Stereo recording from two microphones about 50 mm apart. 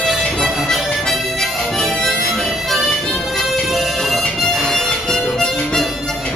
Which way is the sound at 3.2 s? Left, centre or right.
Centre.